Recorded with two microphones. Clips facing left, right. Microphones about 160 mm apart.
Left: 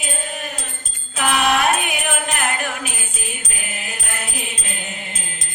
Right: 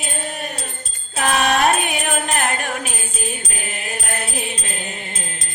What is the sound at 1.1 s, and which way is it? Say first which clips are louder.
Music: even; 40° right (ahead or behind).